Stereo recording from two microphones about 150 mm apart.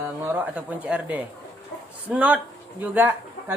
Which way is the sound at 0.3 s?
10° right (ahead or behind).